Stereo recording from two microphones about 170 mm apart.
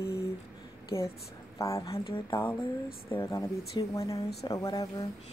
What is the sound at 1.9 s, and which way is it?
Speech, 30° left (ahead or behind).